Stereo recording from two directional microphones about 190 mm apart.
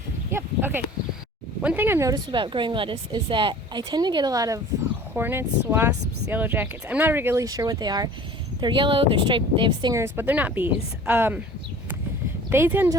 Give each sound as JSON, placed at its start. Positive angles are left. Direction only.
{"t": 0.3, "sound": "a sound", "side_deg": -10}
{"t": 1.6, "sound": "speech", "side_deg": -10}
{"t": 12.5, "sound": "speech", "side_deg": -10}